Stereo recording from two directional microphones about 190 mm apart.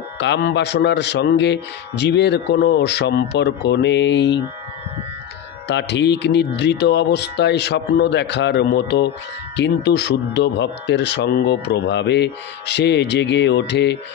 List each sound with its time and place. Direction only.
0.2 s speech: 65° left (ahead or behind)
5.7 s speech: 65° left (ahead or behind)